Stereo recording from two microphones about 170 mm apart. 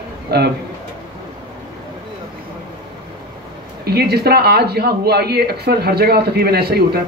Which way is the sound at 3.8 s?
65° right (ahead or behind).